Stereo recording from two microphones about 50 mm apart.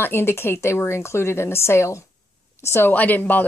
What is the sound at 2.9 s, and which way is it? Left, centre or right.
Speech, left.